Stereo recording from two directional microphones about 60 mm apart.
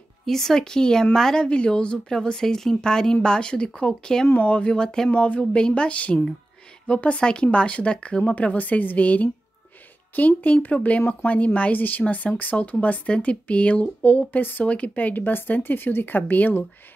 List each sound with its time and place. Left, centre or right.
0.2 s speech: centre
4.3 s speech: left